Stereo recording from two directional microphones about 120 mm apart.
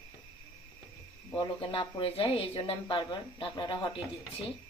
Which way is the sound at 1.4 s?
40° left (ahead or behind).